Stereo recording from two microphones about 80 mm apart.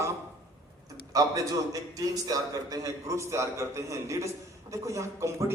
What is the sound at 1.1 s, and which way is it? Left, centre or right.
A man's voice, right.